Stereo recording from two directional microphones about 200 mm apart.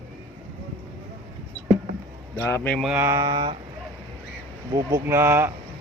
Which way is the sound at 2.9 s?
10° right (ahead or behind).